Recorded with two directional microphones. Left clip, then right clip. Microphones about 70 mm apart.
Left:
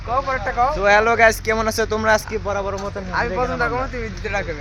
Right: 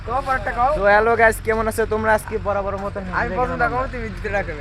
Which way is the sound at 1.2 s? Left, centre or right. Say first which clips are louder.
Left 1 dB; left.